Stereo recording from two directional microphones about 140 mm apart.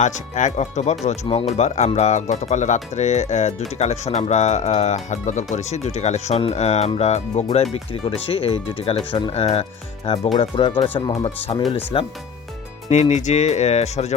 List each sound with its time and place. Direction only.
0.0 s speech: 60° left (ahead or behind); by 12.1 s 40° left (ahead or behind)
12.9 s speech: 55° left (ahead or behind)